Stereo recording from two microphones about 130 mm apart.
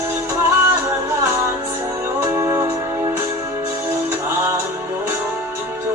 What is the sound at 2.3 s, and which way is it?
Music, 20° right (ahead or behind).